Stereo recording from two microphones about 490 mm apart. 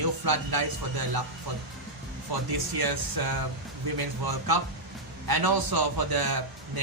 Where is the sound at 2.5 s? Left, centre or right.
Right.